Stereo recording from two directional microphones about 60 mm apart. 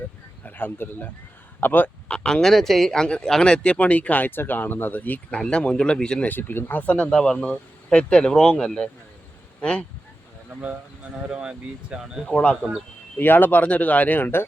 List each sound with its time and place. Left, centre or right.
0.4 s speech: left
2.0 s speech: centre
5.4 s speech: centre
6.2 s speech: left; by 9.8 s centre
10.6 s speech: right
11.3 s speech: centre
12.2 s speech: centre
13.1 s speech: left